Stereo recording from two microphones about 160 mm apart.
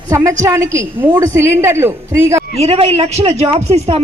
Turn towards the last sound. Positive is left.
turn(degrees=-40)  # may be behind; listen again after turning